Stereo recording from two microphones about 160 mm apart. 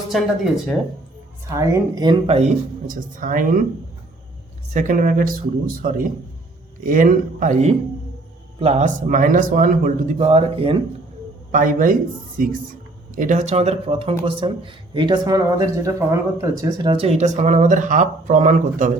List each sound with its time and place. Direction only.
0.1 s speech: centre (ahead or behind)
1.5 s a woman's voice: 25° right (ahead or behind); by 2.5 s 40° right (ahead or behind)
2.8 s a man's voice: 60° right (ahead or behind)
4.7 s a man's voice: 55° right (ahead or behind)
10.2 s speech: 35° right (ahead or behind)
11.5 s a man's voice: 55° right (ahead or behind)